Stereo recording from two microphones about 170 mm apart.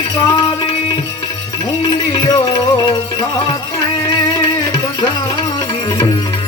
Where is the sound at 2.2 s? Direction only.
30° left (ahead or behind).